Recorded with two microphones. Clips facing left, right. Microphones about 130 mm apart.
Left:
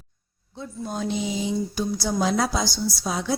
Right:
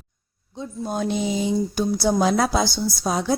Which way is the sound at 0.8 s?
55° right (ahead or behind).